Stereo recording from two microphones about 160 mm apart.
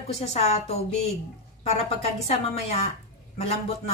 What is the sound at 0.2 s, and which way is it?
A woman's voice, 40° left (ahead or behind).